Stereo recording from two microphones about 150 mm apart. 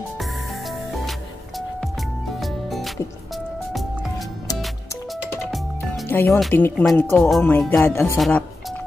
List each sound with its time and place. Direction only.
2.4 s music: centre (ahead or behind)
6.0 s speech: 15° left (ahead or behind)